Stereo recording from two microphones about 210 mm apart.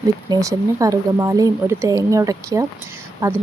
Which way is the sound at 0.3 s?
15° right (ahead or behind).